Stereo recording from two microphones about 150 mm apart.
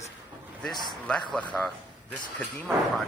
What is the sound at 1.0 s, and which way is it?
A man's voice, 5° left (ahead or behind).